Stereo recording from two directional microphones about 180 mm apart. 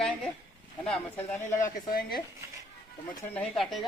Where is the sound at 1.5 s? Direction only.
50° left (ahead or behind).